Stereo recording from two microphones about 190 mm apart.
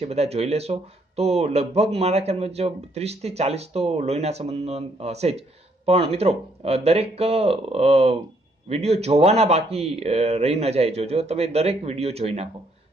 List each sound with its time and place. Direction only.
0.0 s speech: 35° right (ahead or behind)